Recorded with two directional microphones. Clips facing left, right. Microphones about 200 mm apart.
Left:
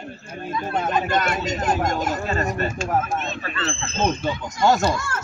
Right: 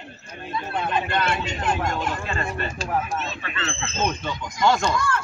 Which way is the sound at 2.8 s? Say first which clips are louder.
Even; 40° left (ahead or behind).